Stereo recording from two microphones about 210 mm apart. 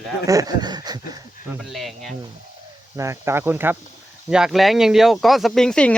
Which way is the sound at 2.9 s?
15° right (ahead or behind).